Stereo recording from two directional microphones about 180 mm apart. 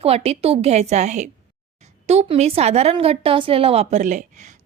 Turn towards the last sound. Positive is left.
turn(degrees=-40)  # may be behind; listen again after turning